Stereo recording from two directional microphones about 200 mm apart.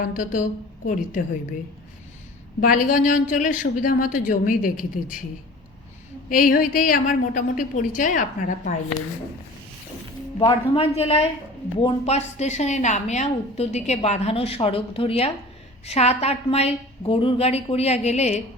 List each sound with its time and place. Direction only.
0.0 s a woman's voice: 40° left (ahead or behind)
2.6 s a woman's voice: 45° left (ahead or behind)
6.2 s a woman's voice: 45° left (ahead or behind)
10.4 s a man's voice: 30° left (ahead or behind)